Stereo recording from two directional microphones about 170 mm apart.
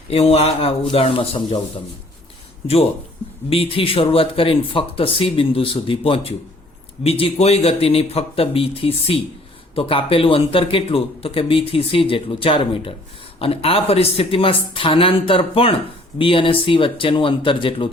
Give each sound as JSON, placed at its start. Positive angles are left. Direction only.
{"t": 0.1, "sound": "a man's voice", "side_deg": 35}
{"t": 3.5, "sound": "a man's voice", "side_deg": 35}